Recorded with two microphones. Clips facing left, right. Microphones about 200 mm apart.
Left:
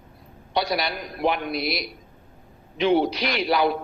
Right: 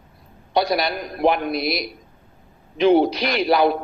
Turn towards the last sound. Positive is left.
turn(degrees=-45)  # may be behind; listen again after turning